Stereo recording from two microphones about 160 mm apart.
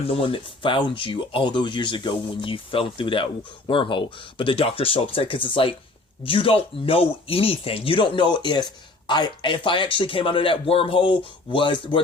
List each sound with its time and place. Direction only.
0.0 s speech: 35° left (ahead or behind)